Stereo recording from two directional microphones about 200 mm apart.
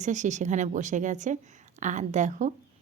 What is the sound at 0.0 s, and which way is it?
A woman's voice, 35° right (ahead or behind).